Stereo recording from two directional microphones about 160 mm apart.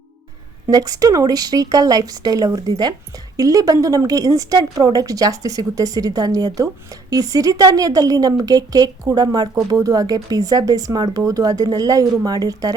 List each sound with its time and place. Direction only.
0.7 s a woman's voice: 25° right (ahead or behind)